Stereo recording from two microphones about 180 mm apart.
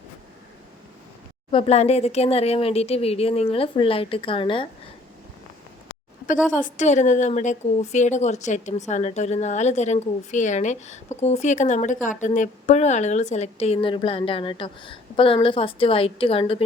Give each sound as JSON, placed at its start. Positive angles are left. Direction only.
{"t": 1.5, "sound": "a woman's voice", "side_deg": 30}
{"t": 6.2, "sound": "a woman's voice", "side_deg": 45}